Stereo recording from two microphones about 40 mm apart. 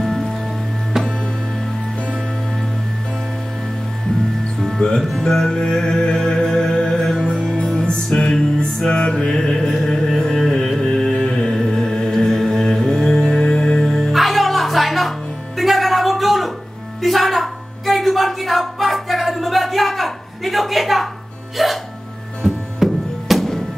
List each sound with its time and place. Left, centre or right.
0.0 s music: centre
1.0 s music: centre
4.6 s music: centre
8.7 s music: centre
10.8 s carnatic music: centre
11.2 s music: left
11.5 s music: centre
17.0 s a sound: centre
21.6 s music: centre